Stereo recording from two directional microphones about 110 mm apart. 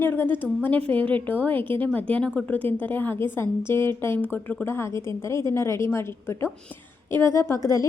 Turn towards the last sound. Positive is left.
turn(degrees=30)  # may be behind; listen again after turning